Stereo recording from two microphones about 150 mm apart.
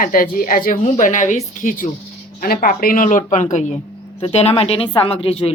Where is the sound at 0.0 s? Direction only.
70° left (ahead or behind).